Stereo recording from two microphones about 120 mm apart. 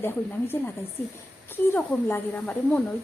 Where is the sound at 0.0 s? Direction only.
20° left (ahead or behind).